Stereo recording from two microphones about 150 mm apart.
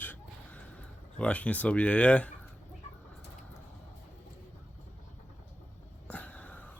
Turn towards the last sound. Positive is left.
turn(degrees=10)  # may be behind; listen again after turning